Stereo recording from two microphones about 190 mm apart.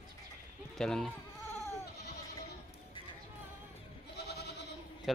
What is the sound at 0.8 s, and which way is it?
Speech, 5° left (ahead or behind).